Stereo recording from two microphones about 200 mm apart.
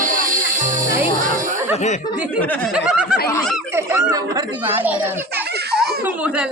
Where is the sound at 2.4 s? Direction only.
10° left (ahead or behind).